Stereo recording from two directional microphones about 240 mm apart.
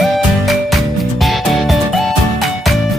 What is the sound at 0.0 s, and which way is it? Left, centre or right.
Music, centre.